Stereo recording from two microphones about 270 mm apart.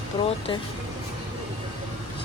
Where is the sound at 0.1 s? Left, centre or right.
Centre.